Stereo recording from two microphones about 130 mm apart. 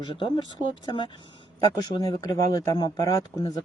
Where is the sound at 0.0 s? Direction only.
35° left (ahead or behind).